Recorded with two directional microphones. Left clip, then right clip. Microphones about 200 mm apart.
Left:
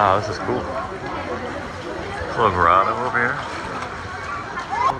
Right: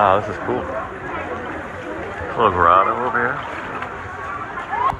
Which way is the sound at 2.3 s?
15° left (ahead or behind).